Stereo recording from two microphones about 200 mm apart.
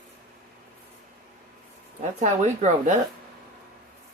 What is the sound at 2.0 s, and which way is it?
Speech, 35° right (ahead or behind).